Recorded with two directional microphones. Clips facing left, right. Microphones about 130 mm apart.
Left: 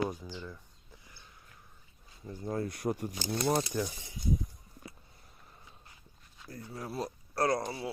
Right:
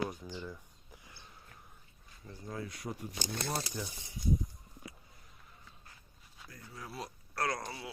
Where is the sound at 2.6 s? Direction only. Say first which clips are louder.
Left 8 dB; 50° left (ahead or behind).